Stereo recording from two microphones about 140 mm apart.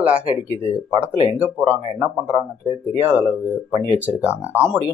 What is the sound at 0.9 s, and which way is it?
Speech, 40° right (ahead or behind).